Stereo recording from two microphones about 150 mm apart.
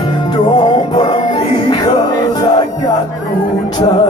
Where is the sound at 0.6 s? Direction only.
30° left (ahead or behind).